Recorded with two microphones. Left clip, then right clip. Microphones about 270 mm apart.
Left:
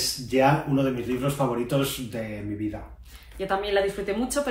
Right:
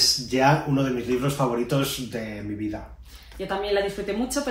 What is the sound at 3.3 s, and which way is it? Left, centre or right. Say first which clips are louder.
Speech: even; centre.